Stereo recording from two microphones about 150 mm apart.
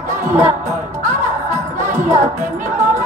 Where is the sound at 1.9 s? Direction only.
20° right (ahead or behind).